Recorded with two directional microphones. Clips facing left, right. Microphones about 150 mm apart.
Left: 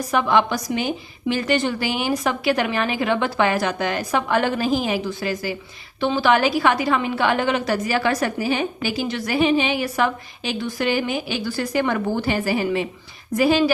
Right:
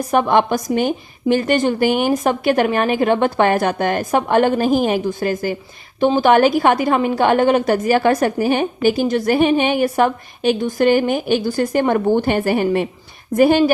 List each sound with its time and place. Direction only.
0.1 s a woman's voice: 50° right (ahead or behind)